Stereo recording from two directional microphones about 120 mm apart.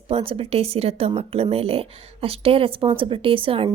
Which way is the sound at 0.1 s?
50° right (ahead or behind).